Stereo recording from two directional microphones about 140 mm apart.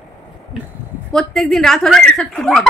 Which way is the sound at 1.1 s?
5° left (ahead or behind).